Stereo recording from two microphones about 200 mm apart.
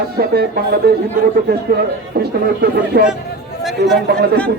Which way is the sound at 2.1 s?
50° right (ahead or behind).